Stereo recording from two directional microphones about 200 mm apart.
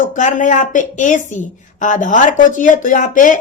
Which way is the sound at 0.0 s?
40° left (ahead or behind).